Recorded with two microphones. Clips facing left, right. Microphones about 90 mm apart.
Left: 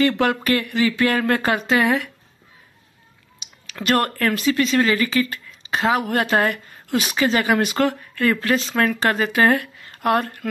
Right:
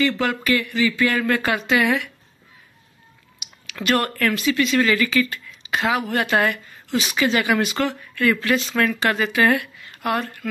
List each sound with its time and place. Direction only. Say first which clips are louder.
0.2 s speech: left 2 dB; 45° left (ahead or behind)
3.3 s speech: even; 35° left (ahead or behind)